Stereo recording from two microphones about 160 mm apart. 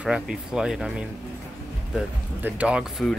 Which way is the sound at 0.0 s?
5° right (ahead or behind).